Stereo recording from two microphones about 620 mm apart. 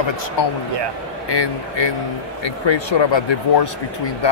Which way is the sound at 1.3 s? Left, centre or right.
Left.